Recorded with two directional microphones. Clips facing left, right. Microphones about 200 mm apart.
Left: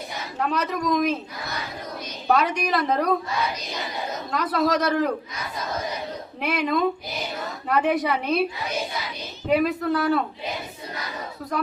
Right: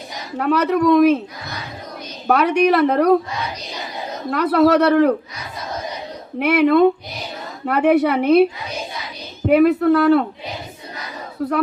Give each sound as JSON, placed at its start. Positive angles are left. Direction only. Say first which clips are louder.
{"t": 0.3, "sound": "a woman's voice", "louder": "right 9 dB", "side_deg": -65}
{"t": 2.2, "sound": "a woman's voice", "louder": "right 7 dB", "side_deg": -65}
{"t": 4.3, "sound": "a woman's voice", "louder": "right 9 dB", "side_deg": -65}
{"t": 6.4, "sound": "a woman's voice", "louder": "right 10 dB", "side_deg": -65}